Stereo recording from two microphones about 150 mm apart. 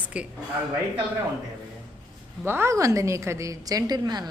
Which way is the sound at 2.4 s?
15° right (ahead or behind).